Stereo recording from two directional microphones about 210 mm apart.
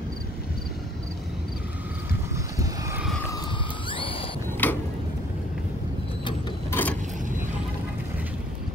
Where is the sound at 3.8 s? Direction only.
25° left (ahead or behind).